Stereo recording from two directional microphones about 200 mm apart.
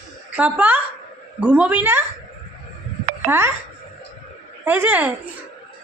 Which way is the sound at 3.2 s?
10° right (ahead or behind).